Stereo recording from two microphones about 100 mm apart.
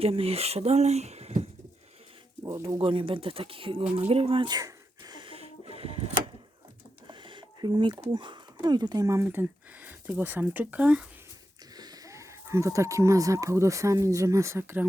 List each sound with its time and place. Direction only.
0.0 s speech: 70° right (ahead or behind); by 1.5 s 90° right
2.4 s speech: 35° right (ahead or behind)
2.7 s speech: 60° right (ahead or behind)
4.1 s speech: 75° right (ahead or behind)
4.4 s a sound: 40° right (ahead or behind)
5.2 s music: 70° right (ahead or behind)
7.1 s a sound: 55° right (ahead or behind)
8.1 s speech: 50° right (ahead or behind)
9.2 s speech: 20° right (ahead or behind)
11.8 s speech: 35° right (ahead or behind)